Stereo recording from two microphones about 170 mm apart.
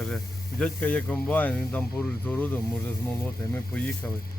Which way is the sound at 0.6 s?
10° left (ahead or behind).